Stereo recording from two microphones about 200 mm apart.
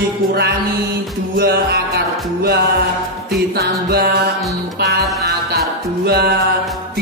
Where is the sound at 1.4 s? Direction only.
50° right (ahead or behind).